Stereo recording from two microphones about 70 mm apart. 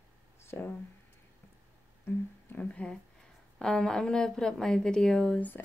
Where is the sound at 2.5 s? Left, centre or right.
Centre.